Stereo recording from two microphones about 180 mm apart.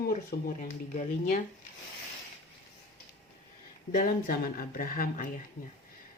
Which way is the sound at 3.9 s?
45° left (ahead or behind).